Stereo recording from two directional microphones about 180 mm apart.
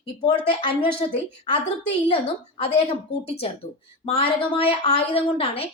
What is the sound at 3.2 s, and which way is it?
A woman's voice, 30° left (ahead or behind).